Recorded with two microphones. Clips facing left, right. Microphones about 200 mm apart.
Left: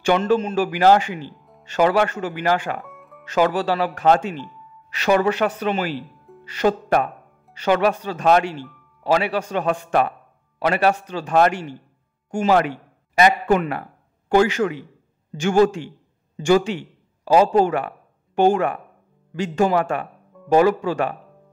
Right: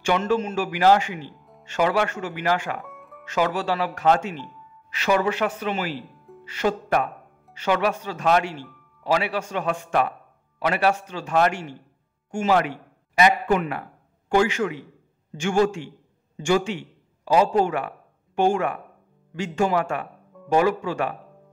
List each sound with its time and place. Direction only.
0.0 s speech: 35° left (ahead or behind)
1.4 s music: centre (ahead or behind)
1.7 s speech: 35° left (ahead or behind)
2.8 s music: centre (ahead or behind)
3.3 s speech: 35° left (ahead or behind)